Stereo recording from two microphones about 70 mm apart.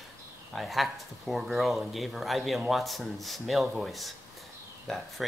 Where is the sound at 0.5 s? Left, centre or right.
Centre.